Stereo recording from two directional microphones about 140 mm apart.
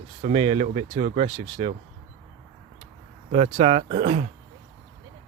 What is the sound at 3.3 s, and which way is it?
Speech, 45° right (ahead or behind).